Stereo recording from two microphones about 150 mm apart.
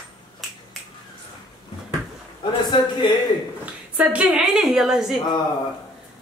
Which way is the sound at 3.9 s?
5° right (ahead or behind).